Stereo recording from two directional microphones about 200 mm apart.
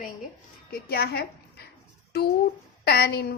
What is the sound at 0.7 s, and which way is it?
Speech, 50° left (ahead or behind).